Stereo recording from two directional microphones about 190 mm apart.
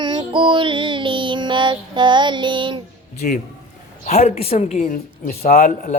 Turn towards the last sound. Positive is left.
turn(degrees=45)  # may be behind; listen again after turning